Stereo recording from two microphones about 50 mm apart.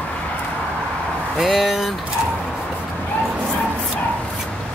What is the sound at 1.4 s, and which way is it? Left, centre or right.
Speech, centre.